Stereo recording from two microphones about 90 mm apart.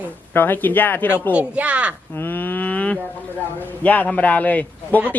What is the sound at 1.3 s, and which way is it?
Speech, 15° right (ahead or behind).